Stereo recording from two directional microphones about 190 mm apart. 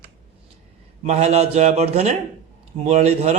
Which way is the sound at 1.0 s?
35° right (ahead or behind).